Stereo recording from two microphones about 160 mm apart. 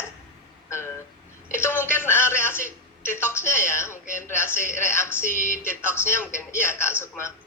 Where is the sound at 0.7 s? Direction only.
15° left (ahead or behind).